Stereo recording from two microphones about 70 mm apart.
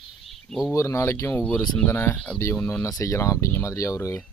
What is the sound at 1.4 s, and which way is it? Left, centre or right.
Speech, left.